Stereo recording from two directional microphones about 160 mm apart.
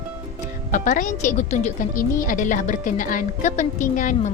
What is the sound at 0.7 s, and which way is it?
A woman's voice, 55° left (ahead or behind).